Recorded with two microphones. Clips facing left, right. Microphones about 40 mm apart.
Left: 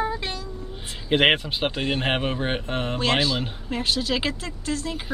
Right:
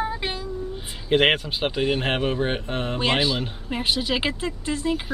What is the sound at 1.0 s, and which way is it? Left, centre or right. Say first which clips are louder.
Speech: even; centre.